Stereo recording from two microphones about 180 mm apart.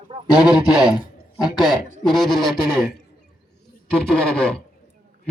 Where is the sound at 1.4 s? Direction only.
Centre (ahead or behind).